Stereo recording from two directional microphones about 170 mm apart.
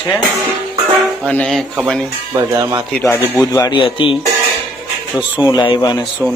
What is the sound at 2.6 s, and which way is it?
Speech, 20° right (ahead or behind).